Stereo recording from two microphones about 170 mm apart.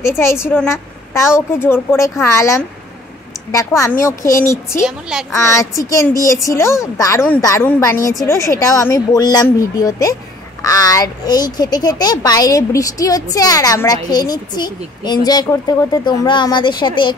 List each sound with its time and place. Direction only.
0.2 s a woman's voice: 15° left (ahead or behind)